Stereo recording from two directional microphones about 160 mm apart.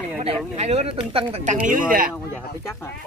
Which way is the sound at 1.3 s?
50° right (ahead or behind).